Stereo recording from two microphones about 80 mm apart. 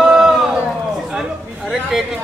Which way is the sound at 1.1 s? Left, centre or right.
Centre.